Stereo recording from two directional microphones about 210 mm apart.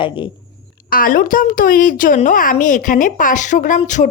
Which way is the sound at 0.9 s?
40° left (ahead or behind).